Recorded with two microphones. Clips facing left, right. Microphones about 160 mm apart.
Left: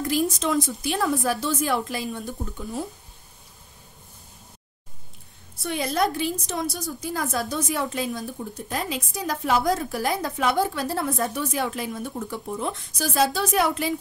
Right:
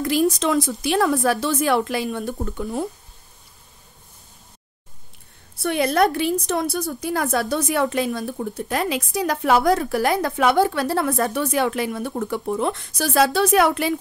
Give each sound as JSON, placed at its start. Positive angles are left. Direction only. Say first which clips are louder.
{"t": 0.0, "sound": "a woman's voice", "louder": "right 5 dB", "side_deg": -80}
{"t": 5.6, "sound": "a woman's voice", "louder": "right 6 dB", "side_deg": -65}